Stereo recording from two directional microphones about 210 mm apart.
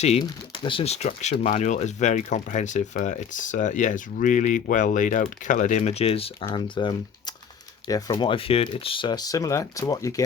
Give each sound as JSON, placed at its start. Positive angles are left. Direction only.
{"t": 0.0, "sound": "speech", "side_deg": 25}